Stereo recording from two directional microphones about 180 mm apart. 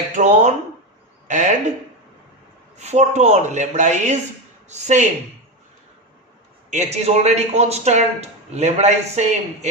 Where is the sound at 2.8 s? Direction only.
40° right (ahead or behind).